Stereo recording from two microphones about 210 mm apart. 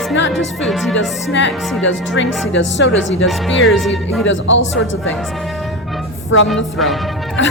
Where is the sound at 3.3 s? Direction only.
Centre (ahead or behind).